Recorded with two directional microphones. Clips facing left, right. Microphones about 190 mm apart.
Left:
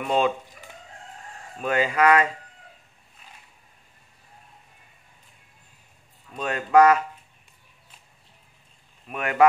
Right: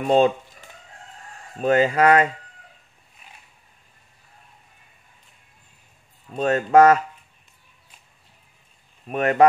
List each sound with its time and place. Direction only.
0.0 s speech: 35° right (ahead or behind)
1.6 s speech: 40° right (ahead or behind)
6.3 s speech: 40° right (ahead or behind)
9.0 s speech: 35° right (ahead or behind)